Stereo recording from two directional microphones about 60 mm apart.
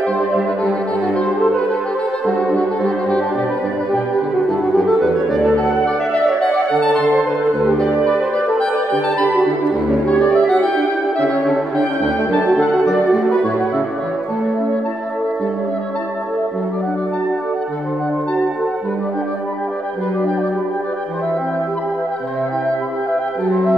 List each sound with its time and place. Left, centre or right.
2.5 s music: centre
4.5 s music: centre
6.4 s music: centre
10.0 s clarinet: centre